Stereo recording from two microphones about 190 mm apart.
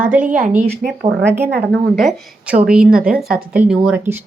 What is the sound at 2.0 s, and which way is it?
A woman's voice, centre (ahead or behind).